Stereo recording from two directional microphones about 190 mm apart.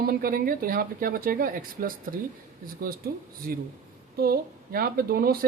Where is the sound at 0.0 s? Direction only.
50° right (ahead or behind).